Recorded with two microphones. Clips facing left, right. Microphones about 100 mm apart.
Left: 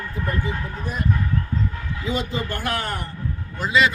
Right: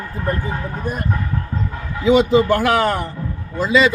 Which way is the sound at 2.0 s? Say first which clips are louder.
Right 14 dB; 90° right.